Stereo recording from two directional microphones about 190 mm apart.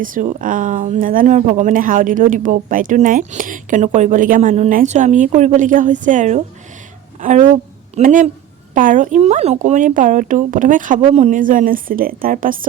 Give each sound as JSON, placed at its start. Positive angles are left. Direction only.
{"t": 0.0, "sound": "a woman's voice", "side_deg": -45}